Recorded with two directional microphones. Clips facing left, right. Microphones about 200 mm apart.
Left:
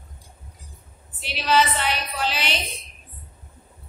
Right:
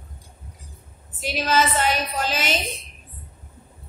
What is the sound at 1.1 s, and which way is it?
Music, 45° right (ahead or behind).